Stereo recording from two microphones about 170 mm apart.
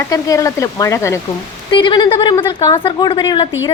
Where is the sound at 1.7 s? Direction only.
25° left (ahead or behind).